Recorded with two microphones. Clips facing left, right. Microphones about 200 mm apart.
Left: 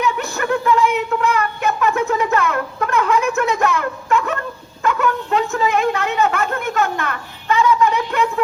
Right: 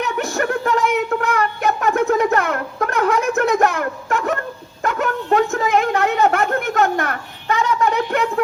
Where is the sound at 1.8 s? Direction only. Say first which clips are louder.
Right 2 dB; 50° right (ahead or behind).